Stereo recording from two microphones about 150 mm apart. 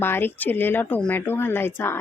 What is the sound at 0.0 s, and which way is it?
Speech, 15° left (ahead or behind).